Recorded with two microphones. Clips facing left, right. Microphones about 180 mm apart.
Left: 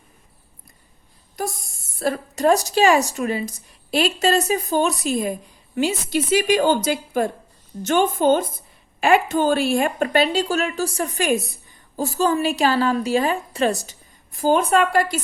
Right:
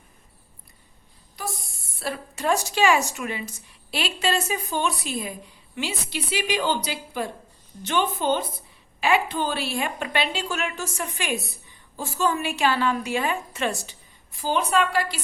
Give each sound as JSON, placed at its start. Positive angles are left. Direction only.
{"t": 1.4, "sound": "a woman's voice", "side_deg": 45}